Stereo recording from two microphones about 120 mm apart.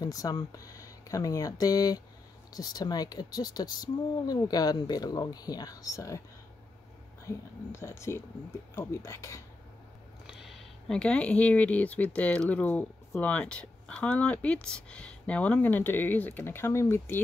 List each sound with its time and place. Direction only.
0.0 s speech: 30° left (ahead or behind)
7.2 s speech: 25° left (ahead or behind)
10.2 s speech: centre (ahead or behind); by 17.2 s 20° left (ahead or behind)